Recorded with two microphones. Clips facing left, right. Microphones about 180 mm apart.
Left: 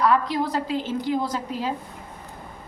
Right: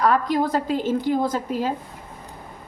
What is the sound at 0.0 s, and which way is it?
A woman's voice, 45° right (ahead or behind).